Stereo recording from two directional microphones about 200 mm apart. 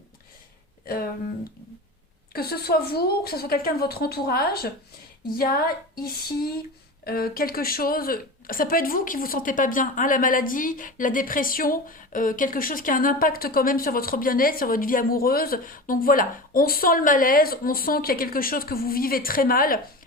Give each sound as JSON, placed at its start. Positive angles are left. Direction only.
{"t": 2.3, "sound": "speech", "side_deg": 50}